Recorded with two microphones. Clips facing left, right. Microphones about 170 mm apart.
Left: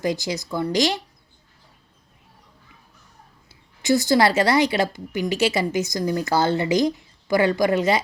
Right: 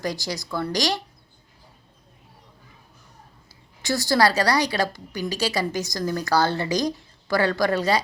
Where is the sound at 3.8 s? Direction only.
20° left (ahead or behind).